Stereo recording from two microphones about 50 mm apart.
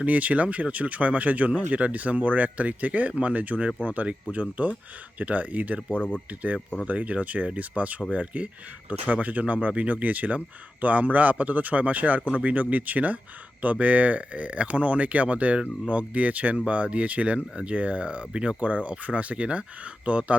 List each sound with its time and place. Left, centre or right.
0.0 s speech: right
6.0 s speech: centre
6.8 s speech: right